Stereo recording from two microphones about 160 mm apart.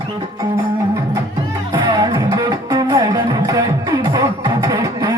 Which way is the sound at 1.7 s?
25° right (ahead or behind).